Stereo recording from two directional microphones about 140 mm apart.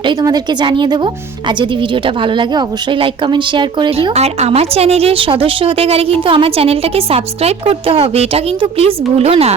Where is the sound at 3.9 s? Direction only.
45° right (ahead or behind).